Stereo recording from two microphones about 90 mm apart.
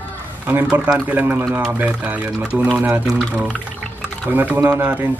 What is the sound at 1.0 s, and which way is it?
Speech, 20° right (ahead or behind).